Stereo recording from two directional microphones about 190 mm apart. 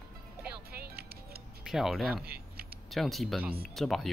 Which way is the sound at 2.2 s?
55° right (ahead or behind).